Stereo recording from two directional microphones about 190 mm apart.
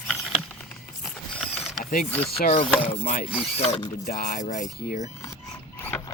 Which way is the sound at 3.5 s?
30° left (ahead or behind).